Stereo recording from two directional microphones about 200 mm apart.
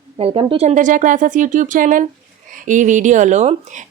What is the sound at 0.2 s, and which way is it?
Speech, 25° right (ahead or behind).